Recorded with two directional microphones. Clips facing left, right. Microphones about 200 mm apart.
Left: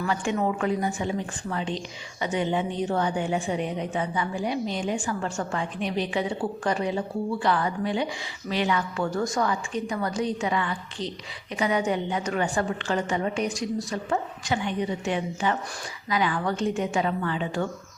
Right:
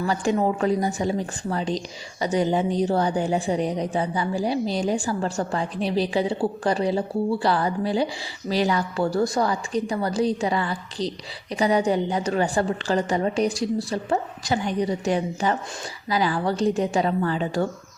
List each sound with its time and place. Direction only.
0.0 s a woman's voice: 35° right (ahead or behind)